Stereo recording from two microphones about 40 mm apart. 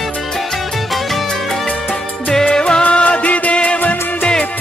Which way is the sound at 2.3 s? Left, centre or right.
Centre.